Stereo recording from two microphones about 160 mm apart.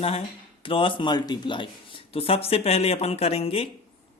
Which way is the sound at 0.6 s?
35° left (ahead or behind).